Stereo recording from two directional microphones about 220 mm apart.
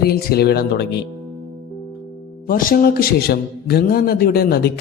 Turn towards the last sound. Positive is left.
turn(degrees=45)  # may be behind; listen again after turning